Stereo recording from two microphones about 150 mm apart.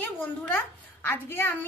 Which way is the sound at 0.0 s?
15° left (ahead or behind).